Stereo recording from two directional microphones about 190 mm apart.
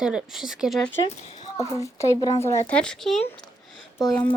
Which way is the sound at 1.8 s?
15° left (ahead or behind).